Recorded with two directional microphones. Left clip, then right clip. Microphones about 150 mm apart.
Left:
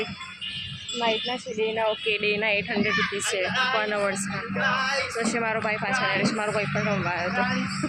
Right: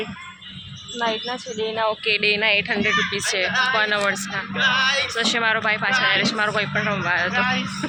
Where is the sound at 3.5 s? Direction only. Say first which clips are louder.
Right 5 dB; 30° right (ahead or behind).